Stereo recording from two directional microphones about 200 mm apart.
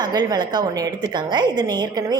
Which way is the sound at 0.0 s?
20° right (ahead or behind).